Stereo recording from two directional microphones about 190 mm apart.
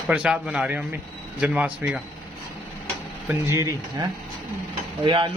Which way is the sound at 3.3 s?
15° right (ahead or behind).